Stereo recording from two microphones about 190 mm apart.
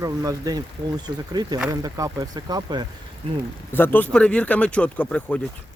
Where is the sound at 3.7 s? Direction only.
10° left (ahead or behind).